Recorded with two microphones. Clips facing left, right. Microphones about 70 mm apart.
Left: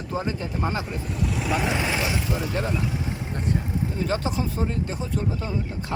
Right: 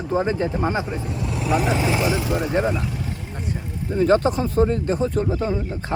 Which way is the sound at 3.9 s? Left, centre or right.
Right.